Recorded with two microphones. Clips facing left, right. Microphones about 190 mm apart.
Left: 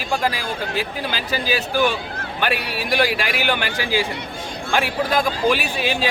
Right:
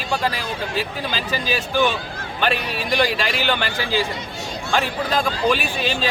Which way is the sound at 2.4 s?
10° left (ahead or behind).